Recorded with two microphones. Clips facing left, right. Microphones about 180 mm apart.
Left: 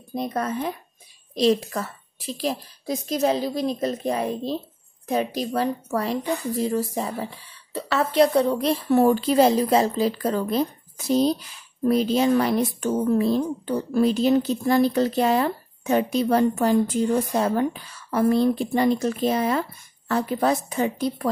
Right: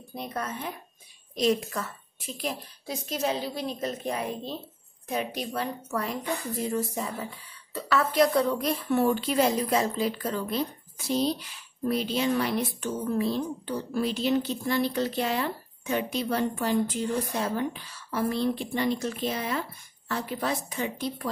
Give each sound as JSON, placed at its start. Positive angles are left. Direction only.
{"t": 0.3, "sound": "a woman's voice", "side_deg": 40}